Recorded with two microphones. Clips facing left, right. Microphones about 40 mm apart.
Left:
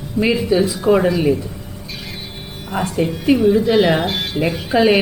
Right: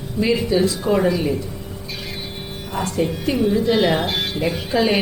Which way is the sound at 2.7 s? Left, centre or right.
Centre.